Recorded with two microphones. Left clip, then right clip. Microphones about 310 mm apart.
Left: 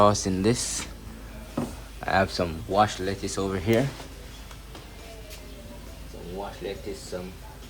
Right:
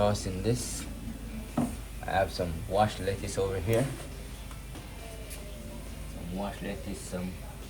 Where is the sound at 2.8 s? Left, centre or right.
Centre.